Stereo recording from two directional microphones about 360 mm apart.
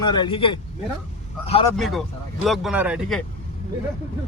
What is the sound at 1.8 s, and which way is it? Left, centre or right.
Speech, centre.